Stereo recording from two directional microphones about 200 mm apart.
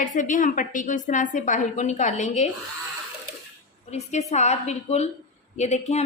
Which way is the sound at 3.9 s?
35° left (ahead or behind).